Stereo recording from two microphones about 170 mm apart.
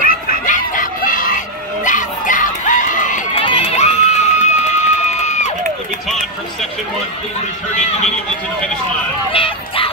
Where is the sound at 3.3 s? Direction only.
30° left (ahead or behind).